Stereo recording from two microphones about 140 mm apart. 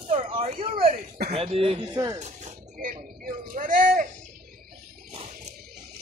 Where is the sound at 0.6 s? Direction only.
85° right.